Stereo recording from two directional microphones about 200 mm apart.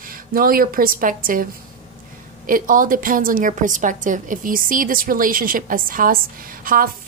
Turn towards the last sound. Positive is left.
turn(degrees=-45)  # may be behind; listen again after turning